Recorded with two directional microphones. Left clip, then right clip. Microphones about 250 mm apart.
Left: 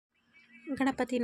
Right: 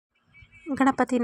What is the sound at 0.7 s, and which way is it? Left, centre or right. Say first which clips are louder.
Speech: right 8 dB; centre.